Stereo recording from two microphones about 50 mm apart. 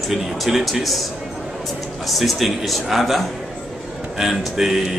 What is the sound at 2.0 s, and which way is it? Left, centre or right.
A man's voice, centre.